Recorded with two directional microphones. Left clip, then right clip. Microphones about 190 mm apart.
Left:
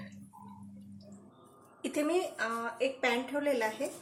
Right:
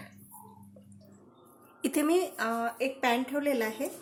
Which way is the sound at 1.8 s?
55° right (ahead or behind).